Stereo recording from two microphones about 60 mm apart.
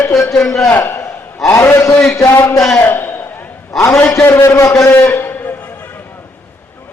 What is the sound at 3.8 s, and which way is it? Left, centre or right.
Speech, left.